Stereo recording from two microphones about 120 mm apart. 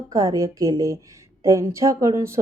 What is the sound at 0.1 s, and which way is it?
Speech, 30° right (ahead or behind).